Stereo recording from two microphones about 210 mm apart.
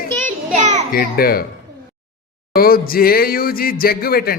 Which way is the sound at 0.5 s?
35° right (ahead or behind).